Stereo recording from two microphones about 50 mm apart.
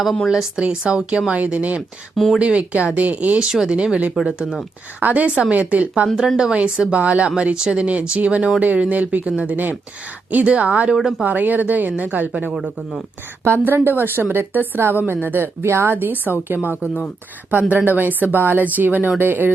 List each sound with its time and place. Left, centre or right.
0.3 s speech: centre
2.1 s speech: centre
2.4 s speech: right
3.4 s speech: centre
6.1 s speech: centre; by 12.5 s right
13.4 s speech: right
14.8 s speech: right
17.7 s speech: right